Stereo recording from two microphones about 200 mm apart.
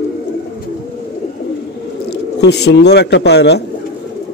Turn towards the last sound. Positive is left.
turn(degrees=55)  # may be behind; listen again after turning